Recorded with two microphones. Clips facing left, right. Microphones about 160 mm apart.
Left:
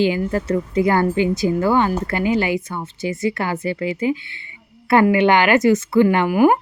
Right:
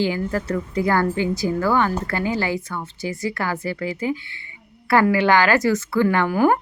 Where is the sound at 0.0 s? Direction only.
20° left (ahead or behind).